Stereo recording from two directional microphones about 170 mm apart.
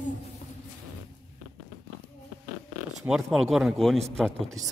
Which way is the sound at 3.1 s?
Centre (ahead or behind).